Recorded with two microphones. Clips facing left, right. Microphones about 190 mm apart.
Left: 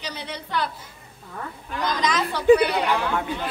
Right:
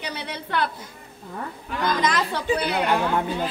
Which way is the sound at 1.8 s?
55° right (ahead or behind).